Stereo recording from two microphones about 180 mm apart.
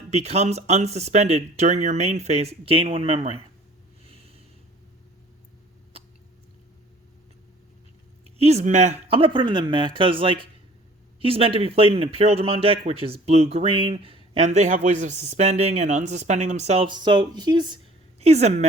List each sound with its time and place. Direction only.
0.1 s speech: 35° right (ahead or behind)
8.2 s speech: 35° right (ahead or behind)
18.2 s a woman's voice: 35° right (ahead or behind)